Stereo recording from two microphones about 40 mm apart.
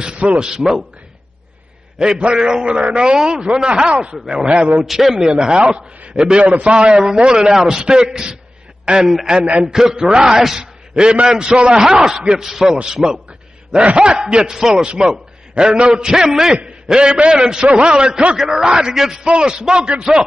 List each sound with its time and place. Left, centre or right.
0.4 s a man's voice: centre
2.0 s a man's voice: centre
4.8 s a man's voice: centre
5.3 s a man's voice: centre; by 6.7 s right
6.7 s a man's voice: right
10.0 s a man's voice: centre
11.8 s a man's voice: centre
13.7 s a man's voice: right
14.5 s a man's voice: centre
16.9 s a man's voice: right
18.3 s a man's voice: centre